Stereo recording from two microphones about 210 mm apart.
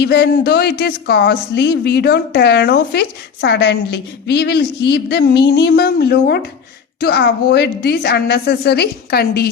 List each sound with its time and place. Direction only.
0.0 s a woman's voice: 50° left (ahead or behind)